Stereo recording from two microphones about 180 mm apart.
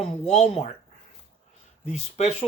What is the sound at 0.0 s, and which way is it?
Speech, 40° left (ahead or behind).